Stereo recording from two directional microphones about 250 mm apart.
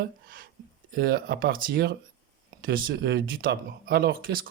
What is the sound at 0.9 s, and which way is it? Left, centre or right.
Speech, right.